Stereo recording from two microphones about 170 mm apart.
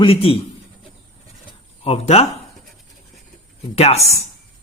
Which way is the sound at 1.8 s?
35° left (ahead or behind).